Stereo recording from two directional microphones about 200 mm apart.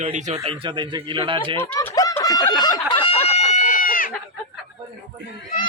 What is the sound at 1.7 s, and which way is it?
Snicker, 15° left (ahead or behind).